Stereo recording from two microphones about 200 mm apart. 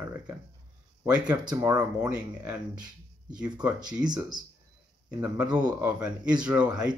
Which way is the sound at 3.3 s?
5° right (ahead or behind).